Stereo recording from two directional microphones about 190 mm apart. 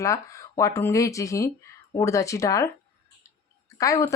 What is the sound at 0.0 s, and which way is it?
Speech, 15° left (ahead or behind).